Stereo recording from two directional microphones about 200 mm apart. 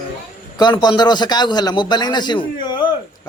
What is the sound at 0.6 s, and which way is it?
A man's voice, 20° left (ahead or behind).